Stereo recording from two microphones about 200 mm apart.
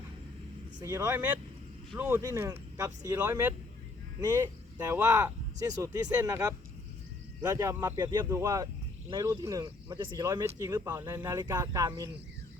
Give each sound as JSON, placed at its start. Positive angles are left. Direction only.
{"t": 0.8, "sound": "speech", "side_deg": -15}